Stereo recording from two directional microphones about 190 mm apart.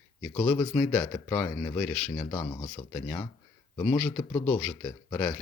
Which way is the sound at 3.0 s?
10° left (ahead or behind).